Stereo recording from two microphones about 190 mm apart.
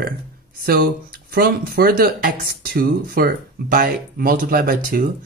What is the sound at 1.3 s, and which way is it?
Speech, 55° right (ahead or behind).